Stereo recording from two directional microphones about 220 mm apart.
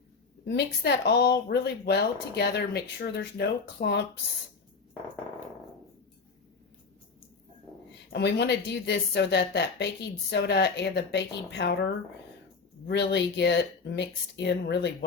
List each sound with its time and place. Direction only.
0.4 s speech: 50° left (ahead or behind)
8.1 s speech: 50° left (ahead or behind)
12.9 s speech: 50° left (ahead or behind)